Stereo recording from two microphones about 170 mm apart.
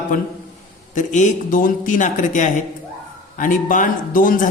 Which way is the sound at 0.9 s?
45° left (ahead or behind).